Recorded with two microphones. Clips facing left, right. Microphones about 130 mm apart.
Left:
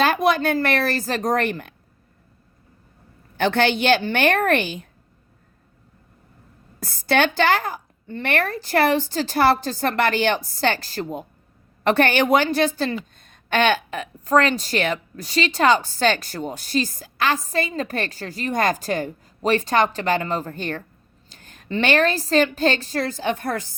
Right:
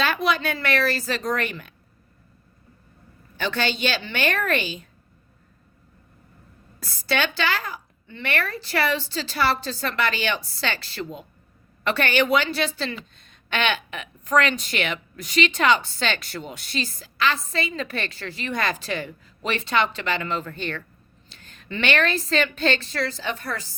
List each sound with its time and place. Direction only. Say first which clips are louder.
0.0 s a woman's voice: left 5 dB; 50° left (ahead or behind)
3.3 s a woman's voice: left 7 dB; 55° left (ahead or behind)
6.7 s a woman's voice: left 6 dB; 50° left (ahead or behind)